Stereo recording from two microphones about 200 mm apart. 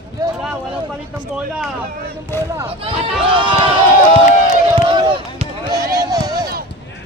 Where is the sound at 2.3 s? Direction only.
10° left (ahead or behind).